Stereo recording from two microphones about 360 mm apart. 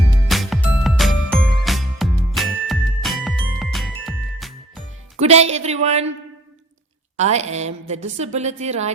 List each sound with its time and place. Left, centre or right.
0.3 s music: centre
5.2 s speech: centre
7.2 s a woman's voice: centre